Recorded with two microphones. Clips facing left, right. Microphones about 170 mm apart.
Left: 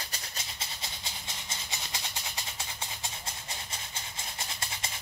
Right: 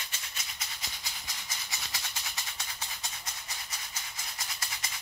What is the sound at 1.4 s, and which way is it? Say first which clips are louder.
Maraca: left 2 dB; 20° left (ahead or behind).